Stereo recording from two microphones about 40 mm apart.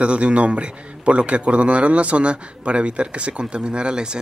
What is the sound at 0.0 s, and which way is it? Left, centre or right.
A man's voice, right.